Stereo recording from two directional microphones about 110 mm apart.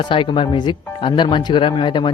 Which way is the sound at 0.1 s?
50° left (ahead or behind).